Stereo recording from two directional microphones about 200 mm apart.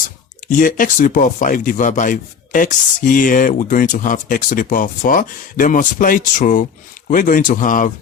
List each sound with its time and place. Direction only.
0.4 s speech: 40° left (ahead or behind)